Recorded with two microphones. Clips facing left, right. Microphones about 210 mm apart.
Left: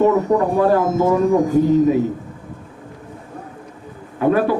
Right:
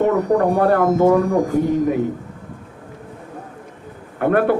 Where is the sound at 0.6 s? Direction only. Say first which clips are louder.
Right 1 dB; 60° right (ahead or behind).